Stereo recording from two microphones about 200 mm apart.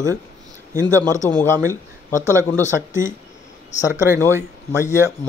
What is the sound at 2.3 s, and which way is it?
Speech, 15° right (ahead or behind).